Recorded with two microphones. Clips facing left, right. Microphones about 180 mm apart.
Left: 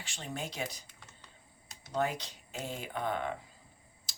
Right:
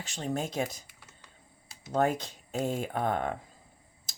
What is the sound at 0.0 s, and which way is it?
Speech, 40° right (ahead or behind).